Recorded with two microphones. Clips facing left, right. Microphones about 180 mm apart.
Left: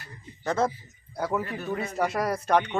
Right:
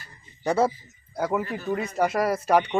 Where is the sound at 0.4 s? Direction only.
10° right (ahead or behind).